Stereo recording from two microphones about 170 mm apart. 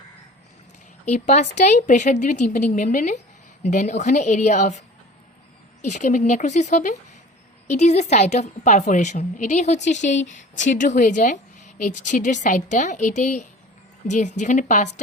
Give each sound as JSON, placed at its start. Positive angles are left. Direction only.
{"t": 1.0, "sound": "a woman's voice", "side_deg": 45}
{"t": 5.8, "sound": "a woman's voice", "side_deg": 45}